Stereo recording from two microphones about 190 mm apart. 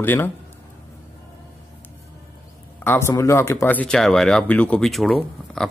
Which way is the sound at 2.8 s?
15° left (ahead or behind).